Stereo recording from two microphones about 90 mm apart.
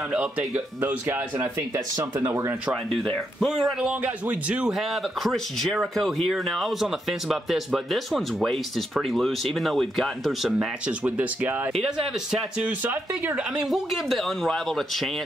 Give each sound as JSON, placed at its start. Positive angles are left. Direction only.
{"t": 0.1, "sound": "speech", "side_deg": -15}
{"t": 3.3, "sound": "speech", "side_deg": 0}
{"t": 4.0, "sound": "speech", "side_deg": -15}
{"t": 10.9, "sound": "speech", "side_deg": -20}
{"t": 11.7, "sound": "speech", "side_deg": -5}
{"t": 12.6, "sound": "speech", "side_deg": -20}
{"t": 13.4, "sound": "speech", "side_deg": -5}